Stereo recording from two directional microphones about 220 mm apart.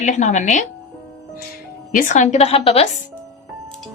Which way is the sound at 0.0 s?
35° left (ahead or behind).